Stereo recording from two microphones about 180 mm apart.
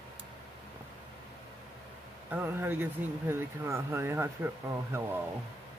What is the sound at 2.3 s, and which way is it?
Speech, 10° right (ahead or behind).